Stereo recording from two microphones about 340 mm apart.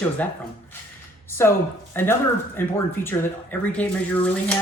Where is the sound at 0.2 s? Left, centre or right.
Centre.